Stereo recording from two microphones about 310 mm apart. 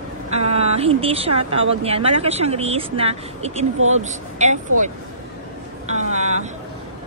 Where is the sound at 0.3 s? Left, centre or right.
Centre.